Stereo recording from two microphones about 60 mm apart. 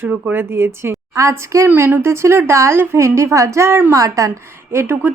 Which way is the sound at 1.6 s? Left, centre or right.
Right.